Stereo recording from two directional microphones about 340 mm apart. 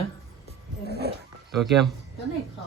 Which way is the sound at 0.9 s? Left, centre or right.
Left.